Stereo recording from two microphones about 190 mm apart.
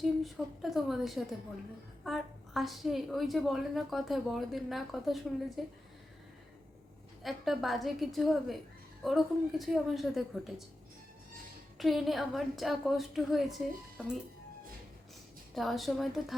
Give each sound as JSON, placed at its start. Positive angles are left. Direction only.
{"t": 0.0, "sound": "a woman's voice", "side_deg": 0}
{"t": 7.2, "sound": "a woman's voice", "side_deg": 0}
{"t": 11.8, "sound": "a woman's voice", "side_deg": 0}
{"t": 15.5, "sound": "a woman's voice", "side_deg": 0}